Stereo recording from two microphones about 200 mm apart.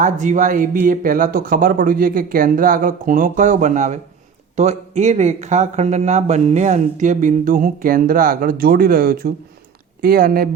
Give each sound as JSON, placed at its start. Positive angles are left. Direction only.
{"t": 0.0, "sound": "speech", "side_deg": -40}